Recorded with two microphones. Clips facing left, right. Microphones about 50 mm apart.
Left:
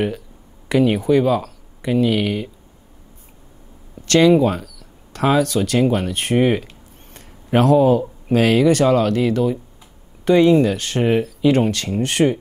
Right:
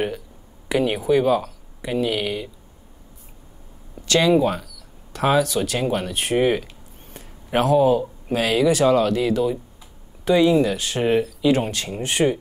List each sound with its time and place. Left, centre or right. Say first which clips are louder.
0.7 s speech: left 4 dB; left
4.1 s speech: left 4 dB; left